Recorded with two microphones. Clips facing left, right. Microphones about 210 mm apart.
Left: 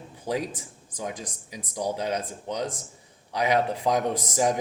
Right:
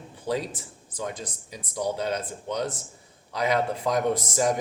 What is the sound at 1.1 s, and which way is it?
Speech, 15° left (ahead or behind).